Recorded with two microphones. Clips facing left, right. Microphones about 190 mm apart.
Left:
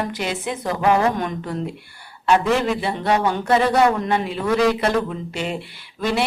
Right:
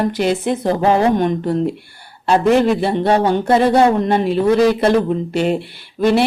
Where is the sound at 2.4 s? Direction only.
55° right (ahead or behind).